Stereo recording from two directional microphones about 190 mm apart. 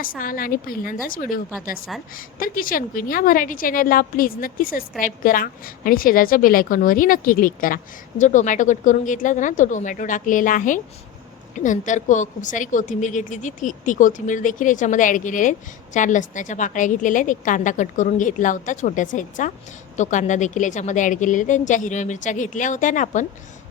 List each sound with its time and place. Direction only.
0.0 s a woman's voice: 50° left (ahead or behind)